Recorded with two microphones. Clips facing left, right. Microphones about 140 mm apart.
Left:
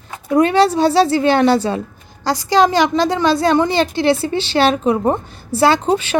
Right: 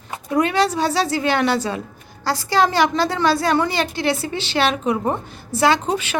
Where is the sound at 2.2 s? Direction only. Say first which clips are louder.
Left 4 dB; 15° left (ahead or behind).